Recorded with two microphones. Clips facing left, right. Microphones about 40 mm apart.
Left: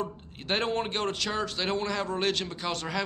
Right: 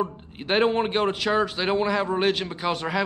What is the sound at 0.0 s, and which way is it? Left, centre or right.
A man's voice, centre.